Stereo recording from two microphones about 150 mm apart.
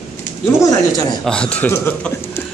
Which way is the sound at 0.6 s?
25° left (ahead or behind).